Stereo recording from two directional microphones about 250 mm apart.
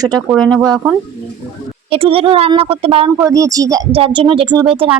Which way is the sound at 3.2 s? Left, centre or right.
Centre.